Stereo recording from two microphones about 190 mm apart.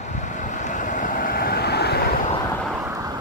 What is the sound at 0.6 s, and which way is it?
Vehicle, 40° left (ahead or behind).